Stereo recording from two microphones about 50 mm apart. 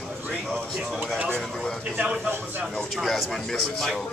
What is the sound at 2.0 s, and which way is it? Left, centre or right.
Speech, right.